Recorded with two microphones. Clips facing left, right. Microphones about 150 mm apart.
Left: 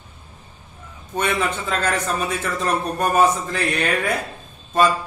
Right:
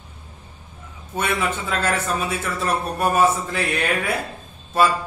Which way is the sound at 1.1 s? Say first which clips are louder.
Left 1 dB; 10° right (ahead or behind).